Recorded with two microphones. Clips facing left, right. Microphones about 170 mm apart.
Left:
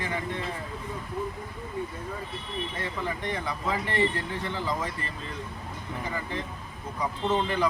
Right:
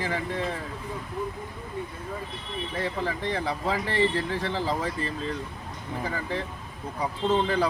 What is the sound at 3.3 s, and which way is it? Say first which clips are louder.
Speech: right 3 dB; 30° right (ahead or behind).